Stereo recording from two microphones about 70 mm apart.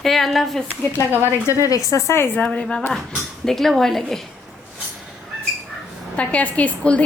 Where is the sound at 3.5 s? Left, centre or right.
Centre.